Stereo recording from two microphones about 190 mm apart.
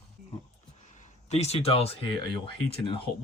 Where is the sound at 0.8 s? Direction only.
40° left (ahead or behind).